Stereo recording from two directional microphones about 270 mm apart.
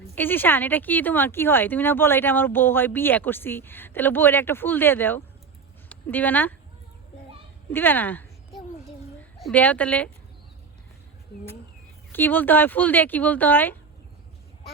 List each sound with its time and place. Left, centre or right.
0.2 s speech: centre
7.7 s a sound: centre
9.4 s a woman's voice: centre
12.1 s speech: centre